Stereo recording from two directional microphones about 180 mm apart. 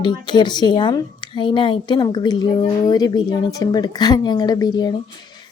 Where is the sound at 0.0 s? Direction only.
25° left (ahead or behind).